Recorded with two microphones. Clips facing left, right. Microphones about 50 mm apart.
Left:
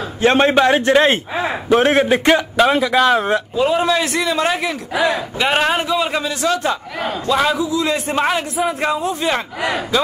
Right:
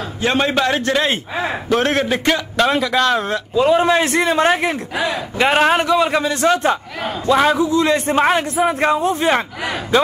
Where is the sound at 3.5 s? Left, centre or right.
Right.